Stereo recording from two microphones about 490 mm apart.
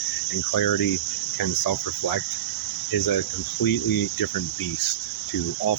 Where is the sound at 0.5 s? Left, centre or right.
Left.